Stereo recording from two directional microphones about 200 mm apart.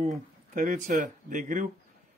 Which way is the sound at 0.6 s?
40° right (ahead or behind).